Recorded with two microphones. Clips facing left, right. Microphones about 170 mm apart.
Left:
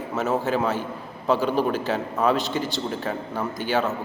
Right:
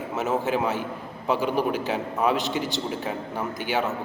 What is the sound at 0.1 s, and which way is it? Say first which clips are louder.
A man's voice: left 1 dB; 20° right (ahead or behind).